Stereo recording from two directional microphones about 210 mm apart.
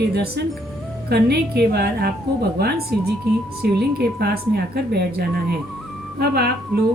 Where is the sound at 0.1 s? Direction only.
50° right (ahead or behind).